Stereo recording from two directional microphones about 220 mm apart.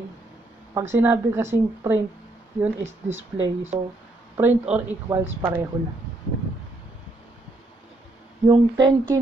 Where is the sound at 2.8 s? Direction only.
60° right (ahead or behind).